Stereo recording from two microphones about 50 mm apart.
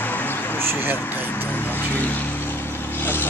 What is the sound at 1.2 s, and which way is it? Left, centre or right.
Vehicle, left.